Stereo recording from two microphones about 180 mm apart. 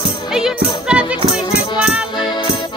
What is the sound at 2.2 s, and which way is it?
Music, 25° left (ahead or behind).